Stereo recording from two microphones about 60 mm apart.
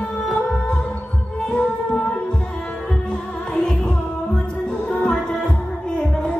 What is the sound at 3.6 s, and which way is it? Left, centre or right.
Music, centre.